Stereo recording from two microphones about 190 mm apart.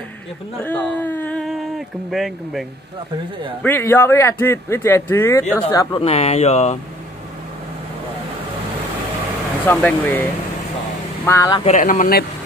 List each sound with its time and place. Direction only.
0.7 s speech: 10° left (ahead or behind)
3.6 s a man's voice: 10° left (ahead or behind)
5.8 s speech: 30° left (ahead or behind)
9.8 s a man's voice: 10° left (ahead or behind)
11.2 s a man's voice: 15° left (ahead or behind)
11.6 s speech: 40° left (ahead or behind)